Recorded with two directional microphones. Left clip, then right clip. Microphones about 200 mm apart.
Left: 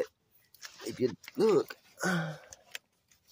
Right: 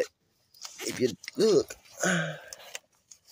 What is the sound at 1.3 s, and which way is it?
Speech, 10° right (ahead or behind).